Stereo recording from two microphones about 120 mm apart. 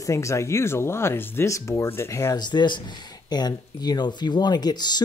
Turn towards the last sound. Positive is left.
turn(degrees=35)  # may be behind; listen again after turning